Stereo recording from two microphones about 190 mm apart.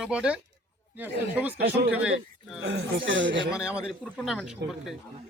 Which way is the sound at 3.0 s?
80° right.